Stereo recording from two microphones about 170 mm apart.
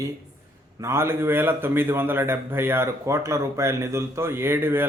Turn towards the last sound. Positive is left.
turn(degrees=-15)  # may be behind; listen again after turning